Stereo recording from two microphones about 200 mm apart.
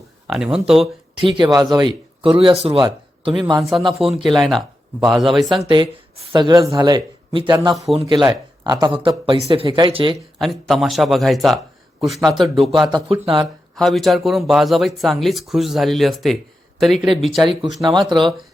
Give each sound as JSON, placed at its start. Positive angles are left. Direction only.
{"t": 0.3, "sound": "speech", "side_deg": -5}
{"t": 1.2, "sound": "speech", "side_deg": -25}
{"t": 3.6, "sound": "speech", "side_deg": 0}
{"t": 5.6, "sound": "speech", "side_deg": -25}
{"t": 10.3, "sound": "a man's voice", "side_deg": 0}
{"t": 12.8, "sound": "speech", "side_deg": -25}
{"t": 13.4, "sound": "speech", "side_deg": 0}
{"t": 17.4, "sound": "speech", "side_deg": -25}